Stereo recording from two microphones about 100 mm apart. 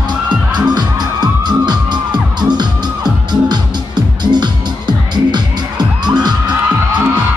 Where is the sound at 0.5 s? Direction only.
45° right (ahead or behind).